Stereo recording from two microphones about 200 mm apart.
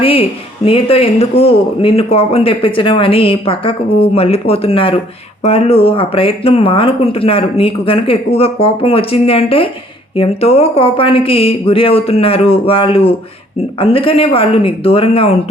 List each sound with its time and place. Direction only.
0.0 s speech: 30° left (ahead or behind)